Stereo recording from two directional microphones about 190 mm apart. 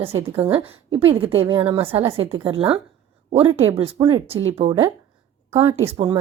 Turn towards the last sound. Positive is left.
turn(degrees=-30)  # may be behind; listen again after turning